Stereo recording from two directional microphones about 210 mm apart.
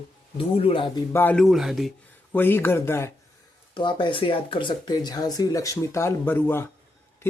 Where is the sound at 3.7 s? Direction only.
25° left (ahead or behind).